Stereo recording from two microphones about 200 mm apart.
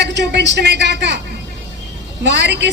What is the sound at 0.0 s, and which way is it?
A woman's voice, 60° right (ahead or behind).